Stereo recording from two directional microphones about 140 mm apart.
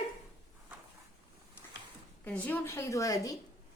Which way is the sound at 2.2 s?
10° left (ahead or behind).